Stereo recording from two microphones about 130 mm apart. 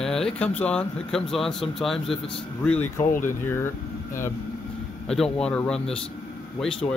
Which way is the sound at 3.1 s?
90° left.